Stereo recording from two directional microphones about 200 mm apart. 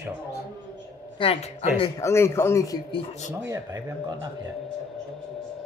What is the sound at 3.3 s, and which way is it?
Speech, 15° right (ahead or behind).